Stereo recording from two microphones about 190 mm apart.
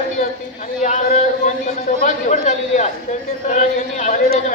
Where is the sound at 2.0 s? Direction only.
40° left (ahead or behind).